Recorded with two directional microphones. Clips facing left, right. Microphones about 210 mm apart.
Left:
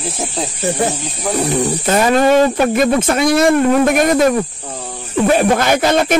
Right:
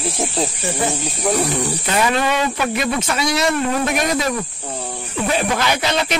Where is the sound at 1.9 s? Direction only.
45° left (ahead or behind).